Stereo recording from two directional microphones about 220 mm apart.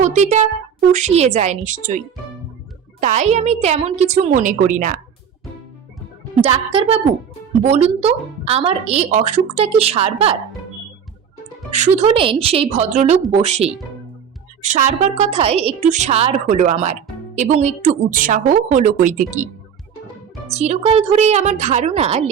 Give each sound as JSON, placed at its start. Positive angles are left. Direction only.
{"t": 0.0, "sound": "music", "side_deg": -30}
{"t": 0.9, "sound": "a woman's voice", "side_deg": -30}
{"t": 3.0, "sound": "a woman's voice", "side_deg": -30}
{"t": 6.4, "sound": "speech", "side_deg": -25}
{"t": 11.7, "sound": "a woman's voice", "side_deg": -30}
{"t": 20.5, "sound": "speech", "side_deg": -30}